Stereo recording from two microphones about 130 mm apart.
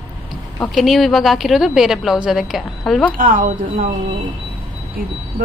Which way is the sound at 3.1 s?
90° right.